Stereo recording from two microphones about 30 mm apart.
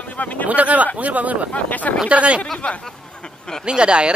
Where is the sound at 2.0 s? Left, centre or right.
Right.